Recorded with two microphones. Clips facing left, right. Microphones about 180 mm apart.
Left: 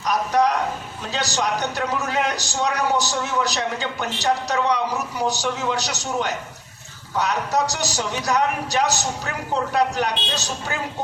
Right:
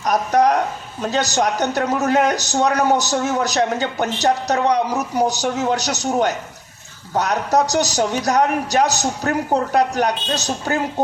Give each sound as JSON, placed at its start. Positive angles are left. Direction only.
{"t": 0.0, "sound": "a man's voice", "side_deg": -45}